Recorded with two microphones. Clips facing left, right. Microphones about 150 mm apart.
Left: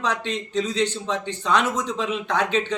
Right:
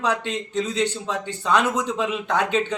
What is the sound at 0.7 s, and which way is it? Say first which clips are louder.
Speech: even; 10° right (ahead or behind).